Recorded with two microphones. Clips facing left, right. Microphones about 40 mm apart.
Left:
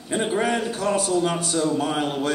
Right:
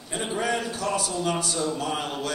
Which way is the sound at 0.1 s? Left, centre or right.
Left.